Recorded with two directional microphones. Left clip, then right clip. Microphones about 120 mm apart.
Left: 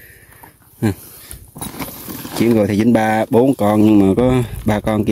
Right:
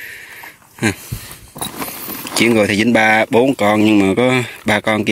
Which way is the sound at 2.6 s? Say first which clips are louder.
Right 3 dB; 30° left (ahead or behind).